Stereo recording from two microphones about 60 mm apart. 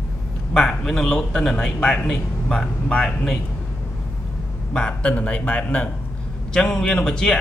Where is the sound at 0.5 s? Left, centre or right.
Centre.